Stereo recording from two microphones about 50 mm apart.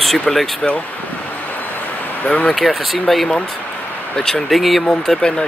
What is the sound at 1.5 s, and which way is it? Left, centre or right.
Vehicle, left.